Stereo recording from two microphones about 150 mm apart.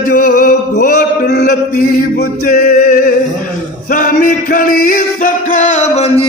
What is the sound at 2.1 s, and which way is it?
Music, 65° left (ahead or behind).